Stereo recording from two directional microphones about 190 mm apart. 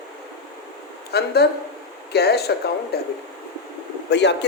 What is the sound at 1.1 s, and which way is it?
Speech, 55° left (ahead or behind).